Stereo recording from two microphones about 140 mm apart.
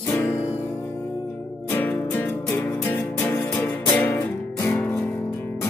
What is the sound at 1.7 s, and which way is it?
Music, 15° left (ahead or behind).